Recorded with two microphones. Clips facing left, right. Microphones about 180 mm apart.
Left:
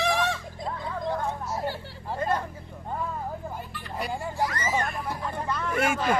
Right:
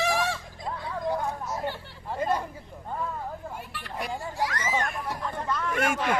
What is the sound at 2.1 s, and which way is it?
Vehicle, 10° right (ahead or behind).